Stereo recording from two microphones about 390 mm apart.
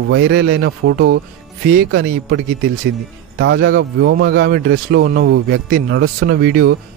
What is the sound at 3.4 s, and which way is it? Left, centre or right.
Speech, right.